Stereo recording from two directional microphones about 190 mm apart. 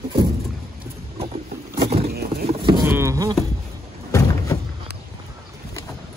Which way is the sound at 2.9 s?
15° right (ahead or behind).